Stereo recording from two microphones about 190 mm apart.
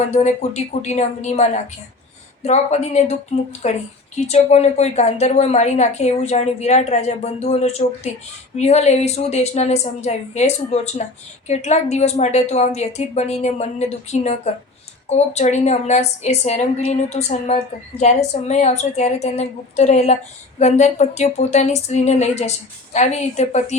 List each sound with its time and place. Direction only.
0.1 s a woman's voice: 35° left (ahead or behind)